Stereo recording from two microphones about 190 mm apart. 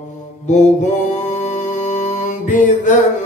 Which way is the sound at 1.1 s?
40° left (ahead or behind).